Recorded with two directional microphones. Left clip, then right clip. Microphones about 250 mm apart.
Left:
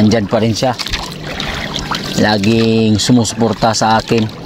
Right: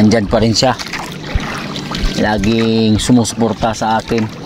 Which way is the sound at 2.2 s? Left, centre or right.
Centre.